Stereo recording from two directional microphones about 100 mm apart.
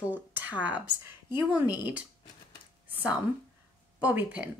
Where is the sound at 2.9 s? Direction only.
15° right (ahead or behind).